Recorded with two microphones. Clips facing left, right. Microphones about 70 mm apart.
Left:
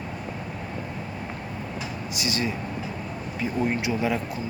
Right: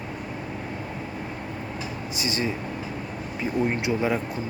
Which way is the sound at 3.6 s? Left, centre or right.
Right.